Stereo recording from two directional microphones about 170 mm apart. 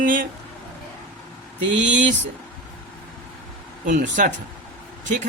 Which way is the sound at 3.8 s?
50° right (ahead or behind).